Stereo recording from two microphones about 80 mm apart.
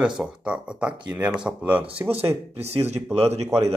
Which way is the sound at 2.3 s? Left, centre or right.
Right.